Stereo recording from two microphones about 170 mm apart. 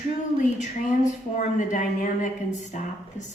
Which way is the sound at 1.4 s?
45° left (ahead or behind).